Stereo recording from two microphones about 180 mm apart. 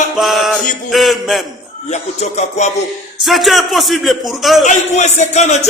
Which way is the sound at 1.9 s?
40° left (ahead or behind).